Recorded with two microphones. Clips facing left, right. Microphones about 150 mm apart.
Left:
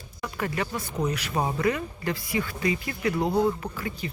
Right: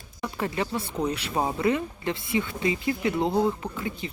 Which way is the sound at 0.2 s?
25° right (ahead or behind).